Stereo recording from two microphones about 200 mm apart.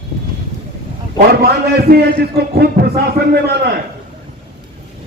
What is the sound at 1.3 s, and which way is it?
A man's voice, 50° right (ahead or behind).